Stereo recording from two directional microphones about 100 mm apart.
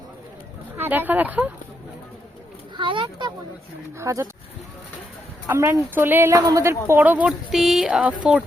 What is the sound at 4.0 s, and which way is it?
Speech, 30° right (ahead or behind).